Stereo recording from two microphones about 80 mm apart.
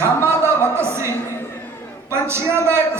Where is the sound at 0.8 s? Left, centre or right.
Right.